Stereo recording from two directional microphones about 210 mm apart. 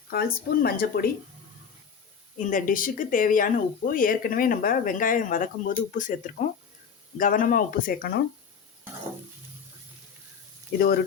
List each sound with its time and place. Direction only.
0.1 s speech: 45° left (ahead or behind)
2.4 s speech: 40° left (ahead or behind)
10.8 s speech: 45° left (ahead or behind)